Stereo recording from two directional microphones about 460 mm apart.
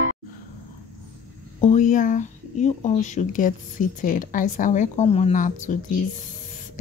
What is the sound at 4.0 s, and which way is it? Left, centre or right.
A woman's voice, centre.